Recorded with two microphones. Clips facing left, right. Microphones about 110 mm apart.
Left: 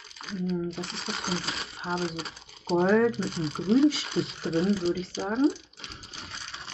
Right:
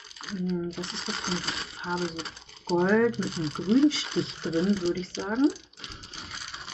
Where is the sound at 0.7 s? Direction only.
Centre (ahead or behind).